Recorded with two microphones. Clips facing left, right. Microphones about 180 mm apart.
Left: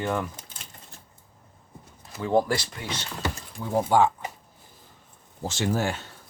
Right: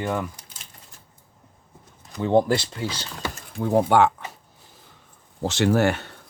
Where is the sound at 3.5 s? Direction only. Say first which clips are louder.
Right 4 dB; 70° right (ahead or behind).